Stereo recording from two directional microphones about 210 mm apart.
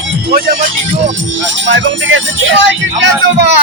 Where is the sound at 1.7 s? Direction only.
60° right (ahead or behind).